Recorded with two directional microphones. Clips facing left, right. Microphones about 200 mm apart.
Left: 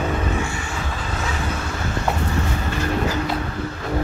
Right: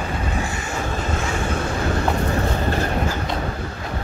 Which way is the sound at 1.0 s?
45° right (ahead or behind).